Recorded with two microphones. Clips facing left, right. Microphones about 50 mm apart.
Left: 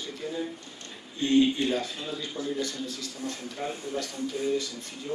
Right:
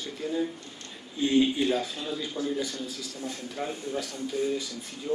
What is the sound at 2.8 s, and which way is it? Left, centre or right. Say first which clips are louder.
Speech: left 1 dB; centre.